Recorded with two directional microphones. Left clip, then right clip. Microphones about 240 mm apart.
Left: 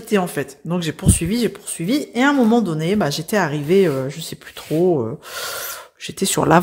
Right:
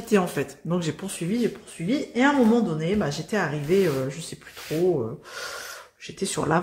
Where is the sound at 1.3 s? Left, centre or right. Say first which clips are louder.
Left 5 dB; left.